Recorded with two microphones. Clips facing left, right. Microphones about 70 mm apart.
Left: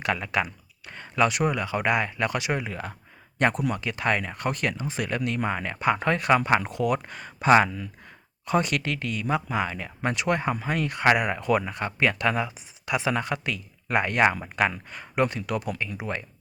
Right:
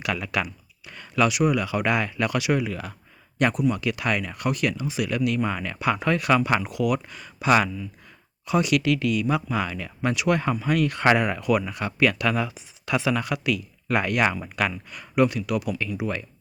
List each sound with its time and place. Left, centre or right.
0.0 s speech: left